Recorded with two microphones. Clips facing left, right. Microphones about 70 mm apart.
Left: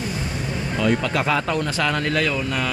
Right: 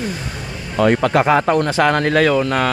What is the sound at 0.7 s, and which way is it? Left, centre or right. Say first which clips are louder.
Speech: right 7 dB; right.